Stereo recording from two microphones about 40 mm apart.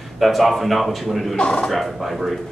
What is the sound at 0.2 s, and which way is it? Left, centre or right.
Speech, centre.